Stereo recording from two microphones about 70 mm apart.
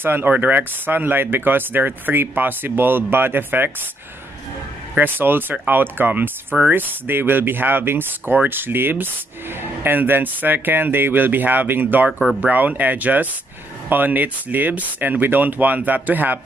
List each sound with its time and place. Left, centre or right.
0.0 s speech: right
4.9 s speech: right